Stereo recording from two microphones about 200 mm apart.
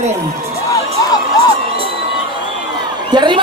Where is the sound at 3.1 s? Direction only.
25° right (ahead or behind).